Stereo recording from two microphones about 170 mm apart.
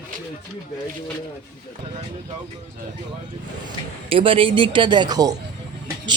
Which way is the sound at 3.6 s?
35° right (ahead or behind).